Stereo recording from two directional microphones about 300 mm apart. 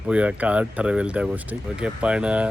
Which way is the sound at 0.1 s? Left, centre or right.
Centre.